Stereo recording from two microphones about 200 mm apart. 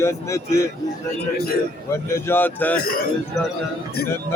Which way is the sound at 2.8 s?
50° left (ahead or behind).